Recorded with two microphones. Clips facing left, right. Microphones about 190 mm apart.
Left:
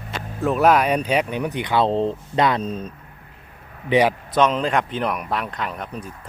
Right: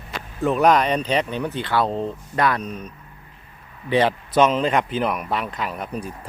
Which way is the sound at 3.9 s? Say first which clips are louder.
Left 2 dB; 10° left (ahead or behind).